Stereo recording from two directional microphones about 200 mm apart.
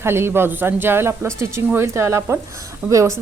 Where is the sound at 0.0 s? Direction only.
10° right (ahead or behind).